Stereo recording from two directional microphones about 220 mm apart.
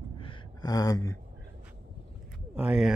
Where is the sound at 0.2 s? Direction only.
20° left (ahead or behind).